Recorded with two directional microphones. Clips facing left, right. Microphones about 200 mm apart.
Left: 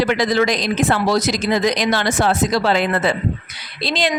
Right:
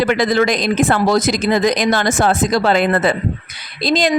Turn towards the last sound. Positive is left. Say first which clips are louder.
# right 5 dB
turn(degrees=-45)  # may be behind; listen again after turning